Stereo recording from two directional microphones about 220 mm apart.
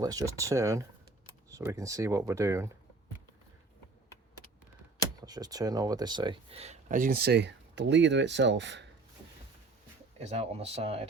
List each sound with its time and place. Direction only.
0.0 s speech: 15° right (ahead or behind)
5.2 s speech: 15° right (ahead or behind); by 8.8 s 55° right (ahead or behind)
10.2 s speech: 30° right (ahead or behind)